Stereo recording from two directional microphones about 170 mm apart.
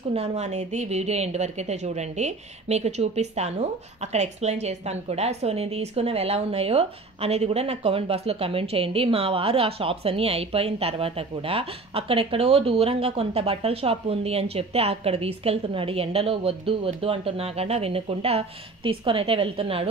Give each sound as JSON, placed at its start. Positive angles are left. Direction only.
{"t": 0.1, "sound": "a woman's voice", "side_deg": -35}